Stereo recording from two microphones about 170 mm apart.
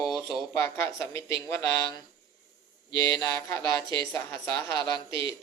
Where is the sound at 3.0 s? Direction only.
15° left (ahead or behind).